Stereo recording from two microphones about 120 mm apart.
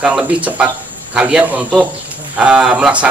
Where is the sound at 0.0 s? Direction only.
10° right (ahead or behind).